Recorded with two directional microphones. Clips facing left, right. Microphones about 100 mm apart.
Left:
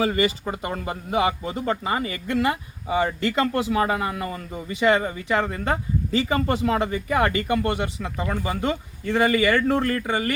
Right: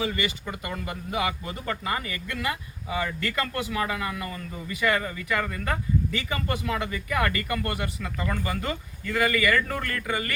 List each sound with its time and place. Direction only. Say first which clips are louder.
0.0 s speech: left 7 dB; 35° left (ahead or behind)